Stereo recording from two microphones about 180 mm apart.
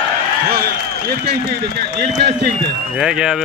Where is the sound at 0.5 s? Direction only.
55° right (ahead or behind).